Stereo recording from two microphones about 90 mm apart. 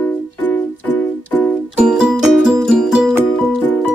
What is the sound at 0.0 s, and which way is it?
Music, 20° left (ahead or behind).